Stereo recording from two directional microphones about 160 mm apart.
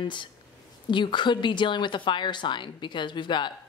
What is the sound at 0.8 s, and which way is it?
Speech, 30° left (ahead or behind).